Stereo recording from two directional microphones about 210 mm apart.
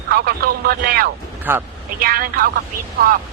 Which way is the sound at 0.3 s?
45° right (ahead or behind).